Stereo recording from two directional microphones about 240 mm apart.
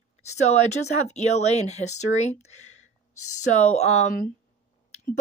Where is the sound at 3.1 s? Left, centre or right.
Left.